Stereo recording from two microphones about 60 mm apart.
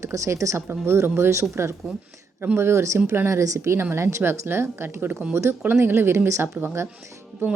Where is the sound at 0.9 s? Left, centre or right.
Right.